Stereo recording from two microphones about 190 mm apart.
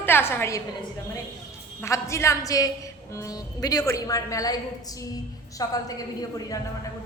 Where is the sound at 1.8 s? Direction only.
15° left (ahead or behind).